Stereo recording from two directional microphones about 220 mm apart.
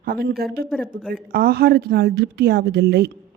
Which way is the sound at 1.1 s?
45° right (ahead or behind).